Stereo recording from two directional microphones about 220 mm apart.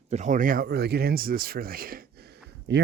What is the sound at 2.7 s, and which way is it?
Speech, 55° right (ahead or behind).